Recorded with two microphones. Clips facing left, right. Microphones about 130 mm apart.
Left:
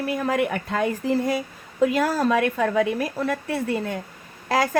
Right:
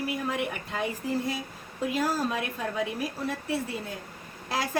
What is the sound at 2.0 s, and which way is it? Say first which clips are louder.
Speech: left 7 dB; 70° left (ahead or behind).